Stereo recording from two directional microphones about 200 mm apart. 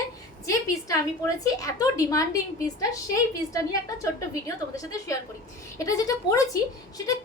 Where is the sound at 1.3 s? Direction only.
15° left (ahead or behind).